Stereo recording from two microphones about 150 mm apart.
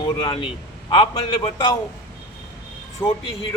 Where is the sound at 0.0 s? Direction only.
35° left (ahead or behind).